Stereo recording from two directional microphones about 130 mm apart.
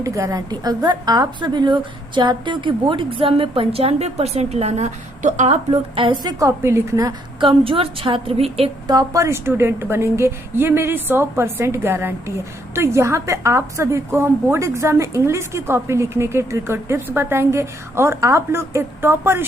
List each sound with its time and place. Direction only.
0.0 s a woman's voice: 25° right (ahead or behind); by 5.8 s 65° right (ahead or behind)
6.0 s a woman's voice: 40° right (ahead or behind)
6.4 s a woman's voice: 20° right (ahead or behind)
7.3 s a woman's voice: 40° right (ahead or behind)
8.9 s a woman's voice: 25° right (ahead or behind)